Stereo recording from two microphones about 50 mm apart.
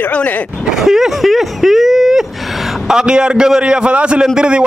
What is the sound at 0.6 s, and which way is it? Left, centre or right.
A man's voice, centre.